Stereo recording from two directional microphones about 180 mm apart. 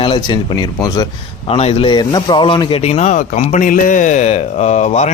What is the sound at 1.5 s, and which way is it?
A man's voice, 35° left (ahead or behind).